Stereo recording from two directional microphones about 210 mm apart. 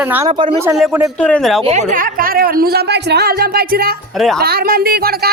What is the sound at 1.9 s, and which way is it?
Speech, 40° right (ahead or behind).